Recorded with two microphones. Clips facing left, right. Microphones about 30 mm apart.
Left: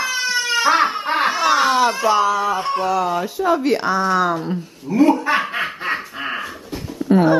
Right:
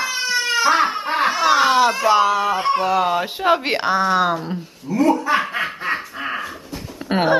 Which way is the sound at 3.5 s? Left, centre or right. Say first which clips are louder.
Even; right.